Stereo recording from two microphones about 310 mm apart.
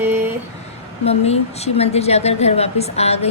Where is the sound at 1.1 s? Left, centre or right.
Centre.